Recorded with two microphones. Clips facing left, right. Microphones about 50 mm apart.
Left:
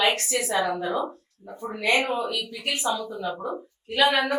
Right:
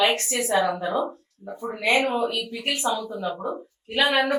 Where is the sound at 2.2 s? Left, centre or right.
Right.